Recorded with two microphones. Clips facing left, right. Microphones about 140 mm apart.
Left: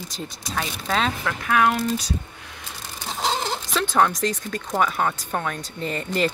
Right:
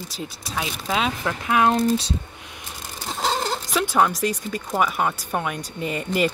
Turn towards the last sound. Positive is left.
turn(degrees=-10)  # may be behind; listen again after turning